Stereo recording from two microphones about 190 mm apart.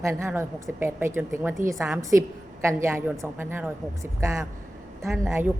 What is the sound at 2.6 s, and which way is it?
A woman's voice, 15° right (ahead or behind).